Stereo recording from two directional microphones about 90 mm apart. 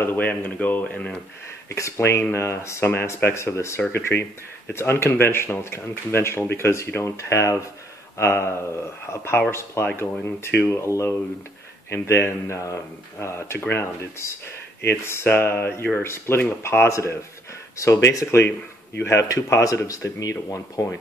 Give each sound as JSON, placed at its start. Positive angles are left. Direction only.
{"t": 0.0, "sound": "speech", "side_deg": 20}
{"t": 1.8, "sound": "speech", "side_deg": 30}
{"t": 10.9, "sound": "speech", "side_deg": 35}